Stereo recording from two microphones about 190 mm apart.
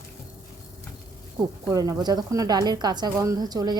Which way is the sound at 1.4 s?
20° right (ahead or behind).